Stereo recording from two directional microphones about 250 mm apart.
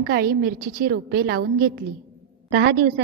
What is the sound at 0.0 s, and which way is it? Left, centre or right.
A woman's voice, right.